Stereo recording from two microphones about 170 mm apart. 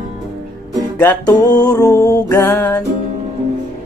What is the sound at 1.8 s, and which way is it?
Speech, 20° left (ahead or behind).